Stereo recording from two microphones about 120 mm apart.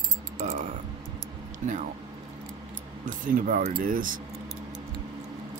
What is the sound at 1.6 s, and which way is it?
Speech, 90° right.